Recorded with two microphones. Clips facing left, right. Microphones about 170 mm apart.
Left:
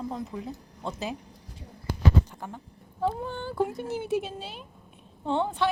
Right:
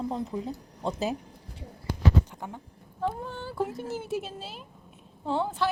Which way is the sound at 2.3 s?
15° right (ahead or behind).